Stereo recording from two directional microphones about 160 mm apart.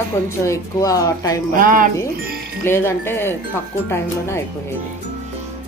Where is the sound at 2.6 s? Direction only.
15° left (ahead or behind).